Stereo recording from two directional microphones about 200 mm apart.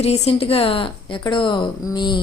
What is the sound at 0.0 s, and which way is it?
A woman's voice, 30° left (ahead or behind).